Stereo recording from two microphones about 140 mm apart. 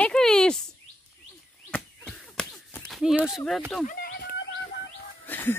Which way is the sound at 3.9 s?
90° left.